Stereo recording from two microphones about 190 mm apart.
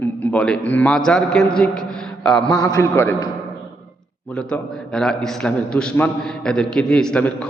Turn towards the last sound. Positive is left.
turn(degrees=5)  # may be behind; listen again after turning